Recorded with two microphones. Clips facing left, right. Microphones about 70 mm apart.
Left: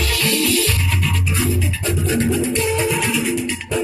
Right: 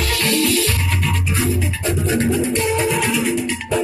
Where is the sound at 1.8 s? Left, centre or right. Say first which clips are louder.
Right 1 dB; right.